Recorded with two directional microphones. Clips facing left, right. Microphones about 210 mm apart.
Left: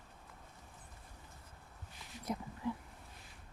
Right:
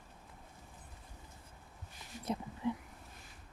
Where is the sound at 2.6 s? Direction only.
20° right (ahead or behind).